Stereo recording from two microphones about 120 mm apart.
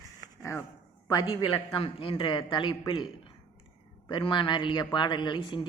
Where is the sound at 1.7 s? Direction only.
50° left (ahead or behind).